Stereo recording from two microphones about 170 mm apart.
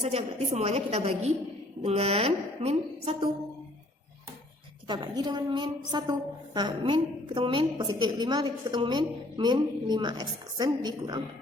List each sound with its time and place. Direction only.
0.0 s a woman's voice: 35° right (ahead or behind)
4.9 s a woman's voice: 25° right (ahead or behind)